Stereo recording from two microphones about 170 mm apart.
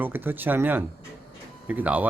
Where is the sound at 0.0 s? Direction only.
10° right (ahead or behind).